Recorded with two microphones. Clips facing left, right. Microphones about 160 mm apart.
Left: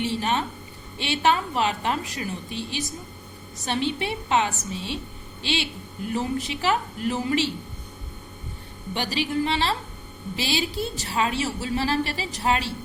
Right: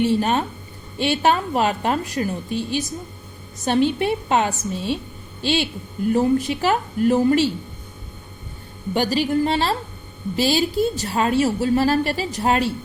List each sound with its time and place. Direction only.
0.0 s a woman's voice: 45° right (ahead or behind)
8.9 s a woman's voice: 45° right (ahead or behind)